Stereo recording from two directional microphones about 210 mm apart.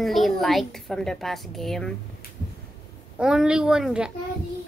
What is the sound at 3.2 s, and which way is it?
Speech, 5° right (ahead or behind).